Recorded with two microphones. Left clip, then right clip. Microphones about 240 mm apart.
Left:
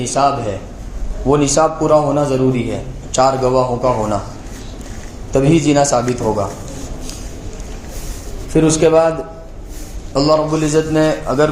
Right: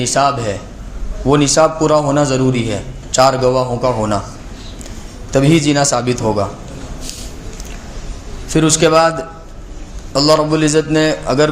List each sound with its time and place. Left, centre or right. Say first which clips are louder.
0.2 s a man's voice: even; right
5.3 s a man's voice: even; right
8.5 s a man's voice: even; right
10.2 s a man's voice: right 2 dB; right